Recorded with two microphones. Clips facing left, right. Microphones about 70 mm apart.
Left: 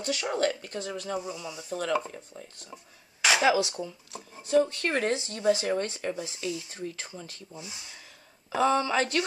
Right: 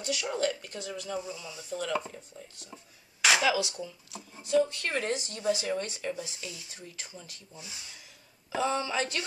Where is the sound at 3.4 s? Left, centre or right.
Left.